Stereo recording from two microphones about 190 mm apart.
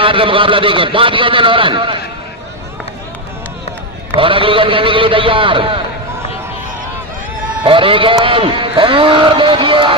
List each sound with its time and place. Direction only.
0.0 s a man's voice: 25° right (ahead or behind)
4.1 s a man's voice: 30° right (ahead or behind)
7.6 s a man's voice: 25° right (ahead or behind)